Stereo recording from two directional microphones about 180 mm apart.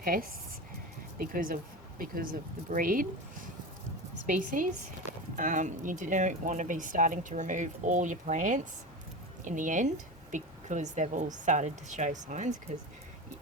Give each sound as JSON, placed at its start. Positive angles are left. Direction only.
{"t": 0.0, "sound": "speech", "side_deg": -50}
{"t": 4.3, "sound": "speech", "side_deg": -45}